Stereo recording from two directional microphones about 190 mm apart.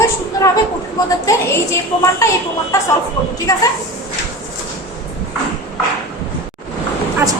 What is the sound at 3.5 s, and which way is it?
Speech, 15° left (ahead or behind).